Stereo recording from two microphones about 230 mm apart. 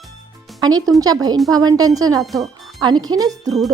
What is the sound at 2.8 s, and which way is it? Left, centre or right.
Speech, centre.